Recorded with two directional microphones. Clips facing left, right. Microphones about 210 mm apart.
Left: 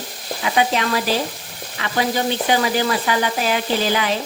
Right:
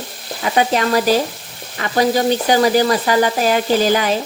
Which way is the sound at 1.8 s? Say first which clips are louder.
Right 5 dB; 45° right (ahead or behind).